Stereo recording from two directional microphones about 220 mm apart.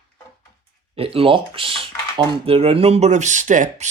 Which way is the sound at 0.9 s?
25° right (ahead or behind).